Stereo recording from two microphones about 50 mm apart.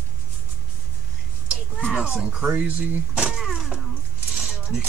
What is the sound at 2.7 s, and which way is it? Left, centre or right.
Speech, right.